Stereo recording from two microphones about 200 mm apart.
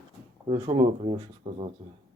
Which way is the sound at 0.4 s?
25° right (ahead or behind).